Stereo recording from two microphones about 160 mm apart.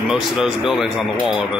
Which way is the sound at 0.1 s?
5° right (ahead or behind).